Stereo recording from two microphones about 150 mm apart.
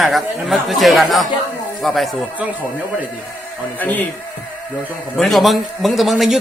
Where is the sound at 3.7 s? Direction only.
10° left (ahead or behind).